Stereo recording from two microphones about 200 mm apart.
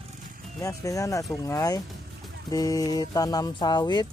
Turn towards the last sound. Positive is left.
turn(degrees=20)  # may be behind; listen again after turning